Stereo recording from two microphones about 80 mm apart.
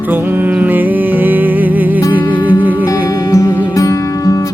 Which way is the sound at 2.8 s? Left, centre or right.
Left.